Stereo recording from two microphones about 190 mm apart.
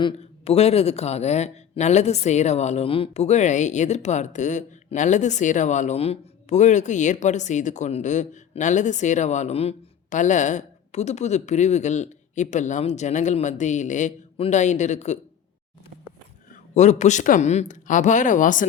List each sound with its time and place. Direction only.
0.0 s speech: 30° left (ahead or behind)
16.5 s speech: 40° left (ahead or behind)